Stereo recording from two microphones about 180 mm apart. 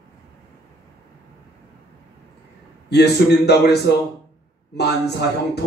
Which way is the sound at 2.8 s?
65° left (ahead or behind).